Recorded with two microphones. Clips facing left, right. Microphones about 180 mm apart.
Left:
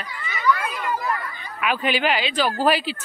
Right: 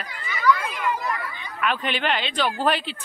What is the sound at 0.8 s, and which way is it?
Chatter, 40° left (ahead or behind).